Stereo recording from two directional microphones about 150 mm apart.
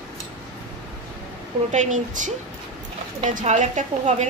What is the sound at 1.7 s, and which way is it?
A woman's voice, 55° right (ahead or behind).